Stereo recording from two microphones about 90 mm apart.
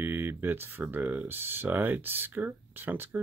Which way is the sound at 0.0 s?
20° right (ahead or behind).